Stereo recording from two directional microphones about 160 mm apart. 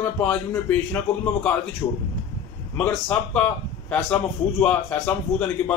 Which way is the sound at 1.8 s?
25° left (ahead or behind).